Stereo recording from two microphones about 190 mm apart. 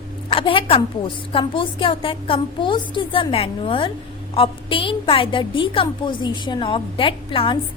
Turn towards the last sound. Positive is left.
turn(degrees=25)  # may be behind; listen again after turning